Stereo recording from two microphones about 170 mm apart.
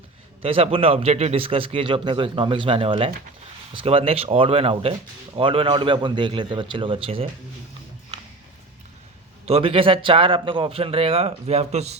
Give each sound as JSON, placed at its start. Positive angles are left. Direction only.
{"t": 0.4, "sound": "a man's voice", "side_deg": -35}
{"t": 9.5, "sound": "a man's voice", "side_deg": -35}